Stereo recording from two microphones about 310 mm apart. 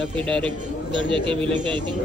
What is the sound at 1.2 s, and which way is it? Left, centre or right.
Speech, centre.